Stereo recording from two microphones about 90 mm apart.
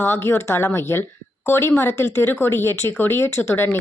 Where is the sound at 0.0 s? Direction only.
25° left (ahead or behind).